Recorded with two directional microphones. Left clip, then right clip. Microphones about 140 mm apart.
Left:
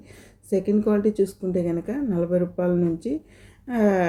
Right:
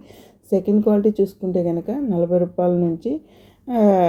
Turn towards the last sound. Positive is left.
turn(degrees=-30)  # may be behind; listen again after turning